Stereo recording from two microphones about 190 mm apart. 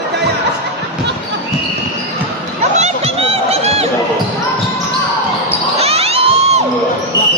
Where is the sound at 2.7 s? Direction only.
35° right (ahead or behind).